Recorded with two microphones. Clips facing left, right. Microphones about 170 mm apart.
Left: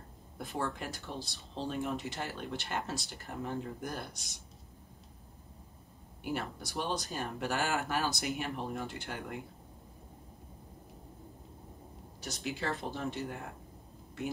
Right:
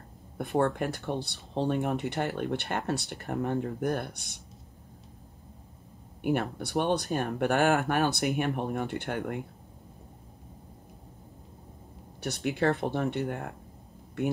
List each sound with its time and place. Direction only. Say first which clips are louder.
0.4 s speech: right 10 dB; 60° right (ahead or behind)
6.2 s speech: right 9 dB; 60° right (ahead or behind)
12.2 s speech: right 10 dB; 60° right (ahead or behind)